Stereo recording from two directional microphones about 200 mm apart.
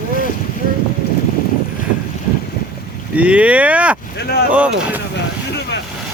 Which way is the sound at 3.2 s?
5° right (ahead or behind).